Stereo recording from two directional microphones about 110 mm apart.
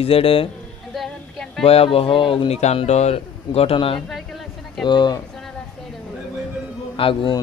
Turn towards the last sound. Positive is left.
turn(degrees=50)  # may be behind; listen again after turning